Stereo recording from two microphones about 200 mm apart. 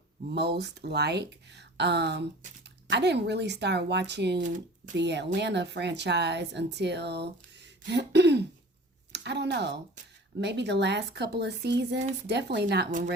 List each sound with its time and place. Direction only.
0.3 s a woman's voice: 55° right (ahead or behind)